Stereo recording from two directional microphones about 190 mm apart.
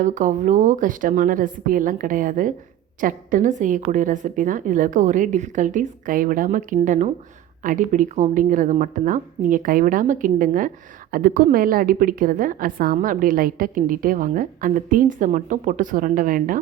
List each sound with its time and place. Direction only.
0.0 s a woman's voice: 40° right (ahead or behind)